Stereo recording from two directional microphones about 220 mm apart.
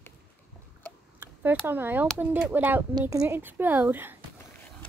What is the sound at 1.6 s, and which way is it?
Speech, 10° right (ahead or behind).